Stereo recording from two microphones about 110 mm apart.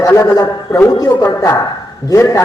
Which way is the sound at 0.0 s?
30° left (ahead or behind).